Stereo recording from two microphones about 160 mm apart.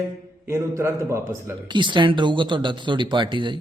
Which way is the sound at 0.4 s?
15° right (ahead or behind).